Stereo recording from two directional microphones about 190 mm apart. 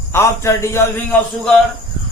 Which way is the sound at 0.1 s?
15° left (ahead or behind).